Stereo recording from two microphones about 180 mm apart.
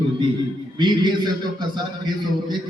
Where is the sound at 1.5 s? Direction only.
25° right (ahead or behind).